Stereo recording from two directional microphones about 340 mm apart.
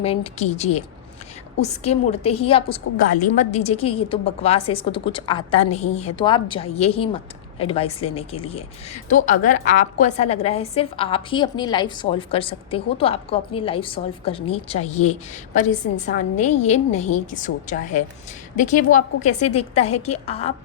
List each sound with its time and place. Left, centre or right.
0.0 s a woman's voice: centre